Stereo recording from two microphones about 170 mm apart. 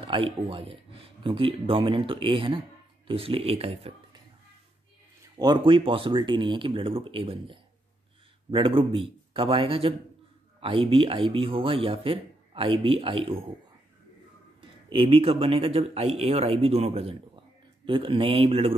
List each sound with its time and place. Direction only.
0.0 s speech: 30° right (ahead or behind)
5.4 s speech: 25° right (ahead or behind)
14.9 s speech: 30° right (ahead or behind)